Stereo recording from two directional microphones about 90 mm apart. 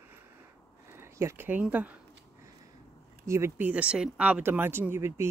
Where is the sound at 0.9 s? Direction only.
30° right (ahead or behind).